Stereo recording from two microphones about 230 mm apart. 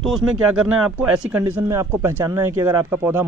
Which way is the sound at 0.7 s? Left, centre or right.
Centre.